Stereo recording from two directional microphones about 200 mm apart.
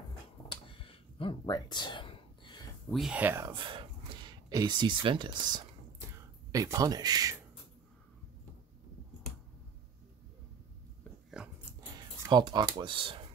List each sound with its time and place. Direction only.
0.5 s a sound: 25° left (ahead or behind)
2.9 s speech: 5° right (ahead or behind); by 7.3 s 20° right (ahead or behind)
11.4 s dog: 5° right (ahead or behind)
12.2 s speech: 20° right (ahead or behind)